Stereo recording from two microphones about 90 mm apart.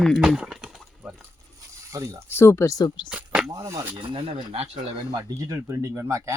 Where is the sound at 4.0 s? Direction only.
70° right (ahead or behind).